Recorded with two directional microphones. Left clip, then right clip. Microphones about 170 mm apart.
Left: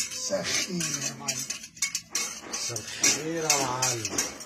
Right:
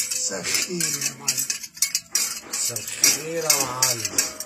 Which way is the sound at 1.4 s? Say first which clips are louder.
Right 5 dB; 45° right (ahead or behind).